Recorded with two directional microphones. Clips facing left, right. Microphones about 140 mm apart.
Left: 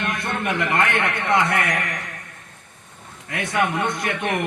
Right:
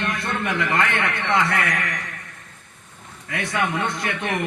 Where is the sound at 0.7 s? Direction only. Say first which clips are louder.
Left 2 dB; 20° left (ahead or behind).